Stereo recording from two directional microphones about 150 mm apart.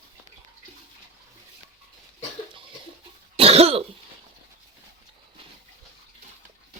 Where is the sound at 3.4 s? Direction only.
40° right (ahead or behind).